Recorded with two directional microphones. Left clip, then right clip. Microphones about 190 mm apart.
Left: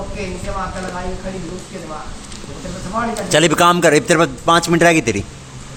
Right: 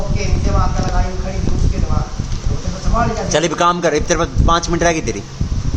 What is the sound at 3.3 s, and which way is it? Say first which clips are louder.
A man's voice: left 3 dB; 30° left (ahead or behind).